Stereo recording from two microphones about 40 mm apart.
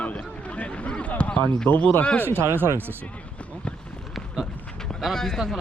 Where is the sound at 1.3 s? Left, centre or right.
Left.